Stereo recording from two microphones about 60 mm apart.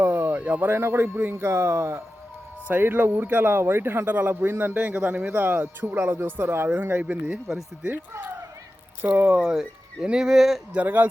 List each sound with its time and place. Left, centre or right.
0.0 s speech: right
1.5 s speech: right
2.6 s speech: right
9.0 s speech: right
9.4 s speech: centre
10.8 s speech: right